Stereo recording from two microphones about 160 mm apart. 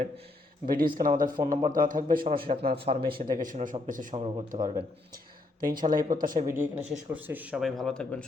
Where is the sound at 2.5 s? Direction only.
45° right (ahead or behind).